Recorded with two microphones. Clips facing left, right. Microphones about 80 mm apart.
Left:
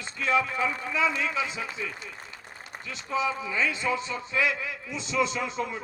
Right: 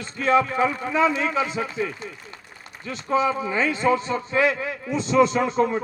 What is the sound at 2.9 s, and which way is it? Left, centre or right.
A man's voice, right.